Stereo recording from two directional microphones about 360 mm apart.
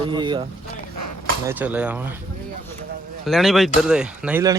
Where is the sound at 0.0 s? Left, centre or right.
Centre.